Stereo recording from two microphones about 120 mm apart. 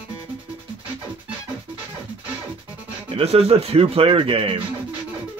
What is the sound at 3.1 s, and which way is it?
Speech, 55° right (ahead or behind).